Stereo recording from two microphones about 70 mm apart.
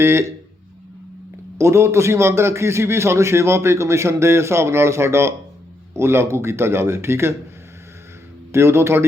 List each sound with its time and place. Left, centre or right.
0.0 s a man's voice: right
1.5 s a man's voice: right
8.5 s a man's voice: right